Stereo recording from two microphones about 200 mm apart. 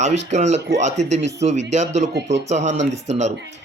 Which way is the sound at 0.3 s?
35° right (ahead or behind).